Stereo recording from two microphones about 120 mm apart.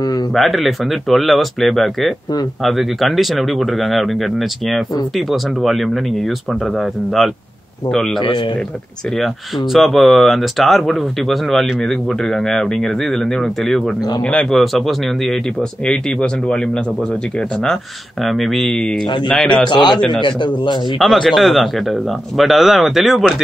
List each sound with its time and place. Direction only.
0.3 s speech: centre (ahead or behind)
9.2 s speech: centre (ahead or behind)
18.2 s speech: centre (ahead or behind)
19.7 s a man's voice: 40° left (ahead or behind)
21.0 s speech: centre (ahead or behind)